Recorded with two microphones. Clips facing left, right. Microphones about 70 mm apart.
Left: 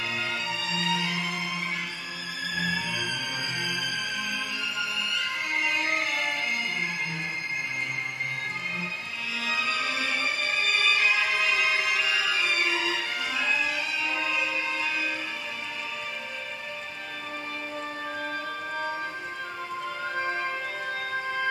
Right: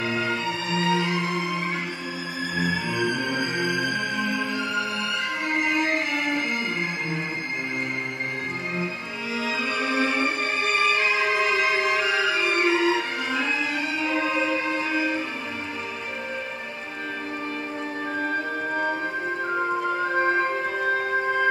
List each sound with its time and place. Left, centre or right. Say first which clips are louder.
0.0 s music: right 6 dB; right
9.4 s music: right 2 dB; right
18.2 s music: right 6 dB; right